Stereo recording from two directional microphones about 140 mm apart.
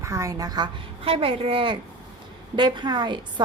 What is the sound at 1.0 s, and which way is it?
A woman's voice, 40° right (ahead or behind).